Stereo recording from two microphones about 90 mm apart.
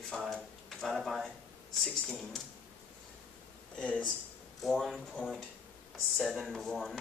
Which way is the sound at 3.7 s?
10° left (ahead or behind).